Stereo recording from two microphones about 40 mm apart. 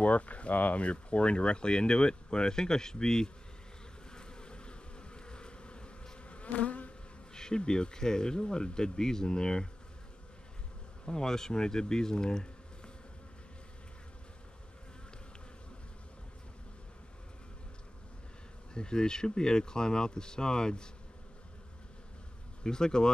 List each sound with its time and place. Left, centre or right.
0.0 s speech: left; by 3.3 s centre
4.1 s bee: left
7.3 s speech: centre
11.1 s speech: centre
18.7 s speech: left
22.6 s speech: centre